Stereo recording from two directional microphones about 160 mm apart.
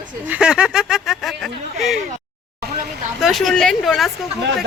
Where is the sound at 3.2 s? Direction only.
Centre (ahead or behind).